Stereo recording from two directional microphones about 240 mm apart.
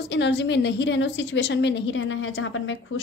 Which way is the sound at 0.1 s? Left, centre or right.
Left.